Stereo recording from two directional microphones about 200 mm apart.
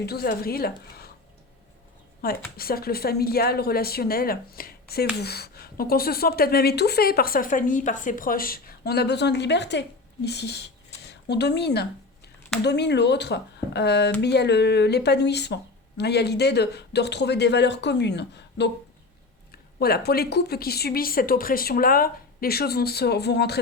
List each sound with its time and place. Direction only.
0.0 s speech: 50° left (ahead or behind)
2.2 s speech: 50° left (ahead or behind)